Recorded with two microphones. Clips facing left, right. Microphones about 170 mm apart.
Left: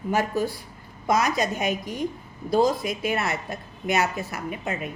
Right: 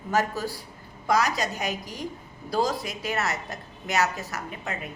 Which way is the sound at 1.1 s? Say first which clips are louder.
Left 2 dB; 35° right (ahead or behind).